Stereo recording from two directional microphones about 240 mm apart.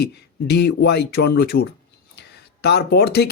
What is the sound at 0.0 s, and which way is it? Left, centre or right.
Speech, left.